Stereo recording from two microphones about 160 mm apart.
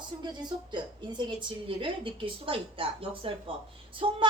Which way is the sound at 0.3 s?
30° right (ahead or behind).